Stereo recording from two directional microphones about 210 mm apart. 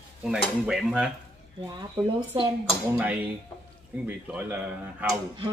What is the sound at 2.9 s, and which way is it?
A man's voice, 10° right (ahead or behind).